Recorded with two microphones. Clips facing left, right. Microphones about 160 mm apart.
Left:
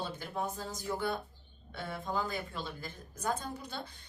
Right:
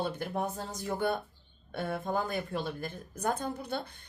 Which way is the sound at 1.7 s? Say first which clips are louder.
Right 5 dB; 55° right (ahead or behind).